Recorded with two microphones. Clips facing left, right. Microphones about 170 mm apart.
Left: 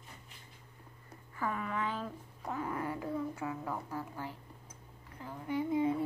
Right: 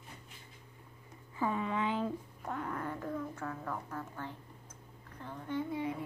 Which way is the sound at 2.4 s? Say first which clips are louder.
Left 2 dB; 5° left (ahead or behind).